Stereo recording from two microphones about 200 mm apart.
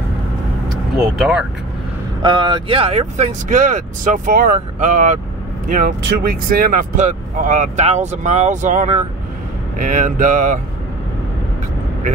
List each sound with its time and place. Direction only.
0.9 s speech: 5° right (ahead or behind)
2.2 s speech: 25° right (ahead or behind); by 10.6 s 40° right (ahead or behind)